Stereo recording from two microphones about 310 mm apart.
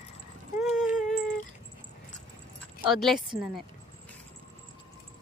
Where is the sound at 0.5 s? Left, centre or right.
Centre.